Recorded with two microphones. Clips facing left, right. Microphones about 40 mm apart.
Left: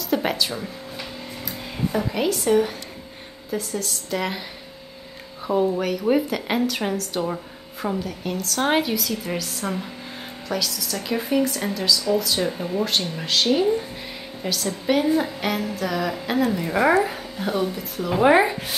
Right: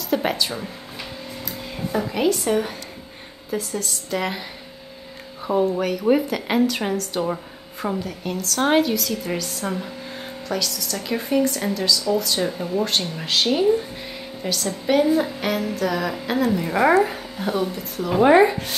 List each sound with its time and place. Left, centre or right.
0.1 s a woman's voice: centre
1.9 s a woman's voice: centre
5.5 s a woman's voice: centre
14.4 s a woman's voice: centre